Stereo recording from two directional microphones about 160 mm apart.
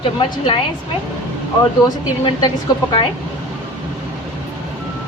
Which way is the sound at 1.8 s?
25° left (ahead or behind).